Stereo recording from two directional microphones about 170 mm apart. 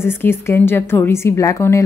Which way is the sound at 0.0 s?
15° left (ahead or behind).